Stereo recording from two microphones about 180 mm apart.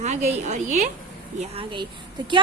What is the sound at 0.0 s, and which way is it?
Speech, 40° right (ahead or behind).